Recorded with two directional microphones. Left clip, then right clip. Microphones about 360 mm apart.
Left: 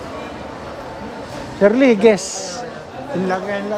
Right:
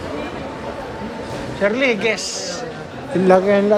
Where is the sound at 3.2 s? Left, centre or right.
Centre.